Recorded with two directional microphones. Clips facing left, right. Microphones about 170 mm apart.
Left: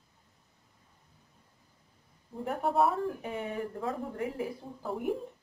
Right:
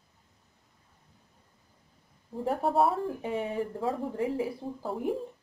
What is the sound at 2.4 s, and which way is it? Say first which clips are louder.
Speech: right 2 dB; 30° right (ahead or behind).